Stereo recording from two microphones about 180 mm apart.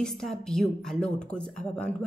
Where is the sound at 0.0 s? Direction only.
Centre (ahead or behind).